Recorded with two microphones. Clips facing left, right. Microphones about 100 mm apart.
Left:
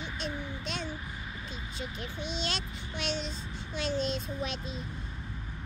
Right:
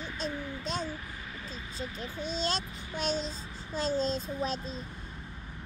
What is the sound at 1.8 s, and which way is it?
A child's voice, 40° right (ahead or behind).